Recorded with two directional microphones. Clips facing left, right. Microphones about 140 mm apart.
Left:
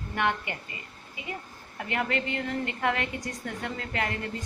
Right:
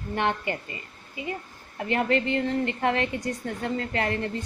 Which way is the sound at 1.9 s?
30° right (ahead or behind).